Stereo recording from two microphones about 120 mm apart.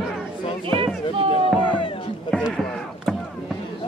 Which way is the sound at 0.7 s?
50° right (ahead or behind).